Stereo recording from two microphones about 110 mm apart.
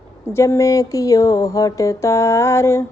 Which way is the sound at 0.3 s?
25° left (ahead or behind).